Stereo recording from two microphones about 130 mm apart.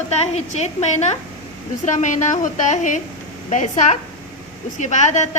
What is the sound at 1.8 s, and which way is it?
A woman's voice, 70° left (ahead or behind).